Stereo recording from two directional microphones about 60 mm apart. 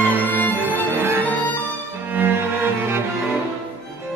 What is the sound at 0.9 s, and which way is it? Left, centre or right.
Music, right.